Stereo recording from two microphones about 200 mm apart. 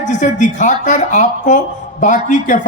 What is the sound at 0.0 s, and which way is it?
Speech, 40° left (ahead or behind).